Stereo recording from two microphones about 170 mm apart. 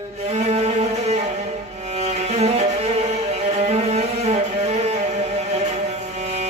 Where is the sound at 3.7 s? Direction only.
40° right (ahead or behind).